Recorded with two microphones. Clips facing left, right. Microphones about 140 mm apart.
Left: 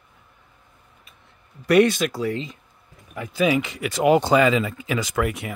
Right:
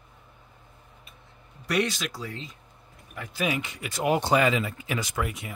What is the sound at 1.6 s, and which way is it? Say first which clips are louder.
Speech: left 10 dB; 55° left (ahead or behind).